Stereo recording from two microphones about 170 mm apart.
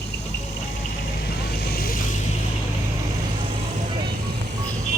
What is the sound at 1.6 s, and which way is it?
Vehicle, 65° left (ahead or behind).